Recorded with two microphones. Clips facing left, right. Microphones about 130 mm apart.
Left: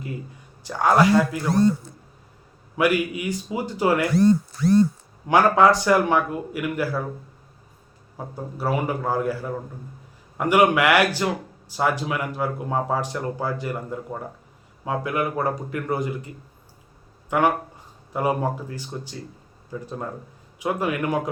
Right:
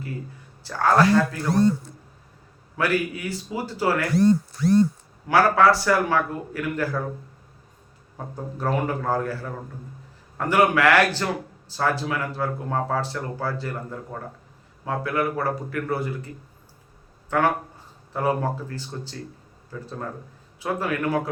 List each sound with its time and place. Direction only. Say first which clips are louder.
0.6 s speech: left 1 dB; 15° left (ahead or behind)
2.7 s speech: left 3 dB; 15° left (ahead or behind)
5.3 s speech: left 1 dB; 20° left (ahead or behind)
8.4 s speech: even; 10° left (ahead or behind)